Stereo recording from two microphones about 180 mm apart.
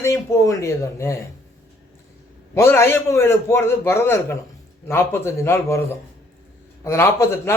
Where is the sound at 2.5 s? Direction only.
15° left (ahead or behind).